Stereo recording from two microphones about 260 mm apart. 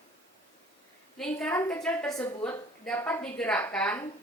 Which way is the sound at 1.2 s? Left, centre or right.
Centre.